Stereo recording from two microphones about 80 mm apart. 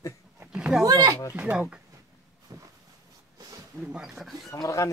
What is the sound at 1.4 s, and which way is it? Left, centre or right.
Speech, centre.